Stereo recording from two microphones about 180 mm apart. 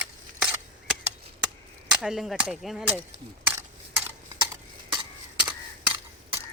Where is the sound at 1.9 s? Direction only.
5° right (ahead or behind).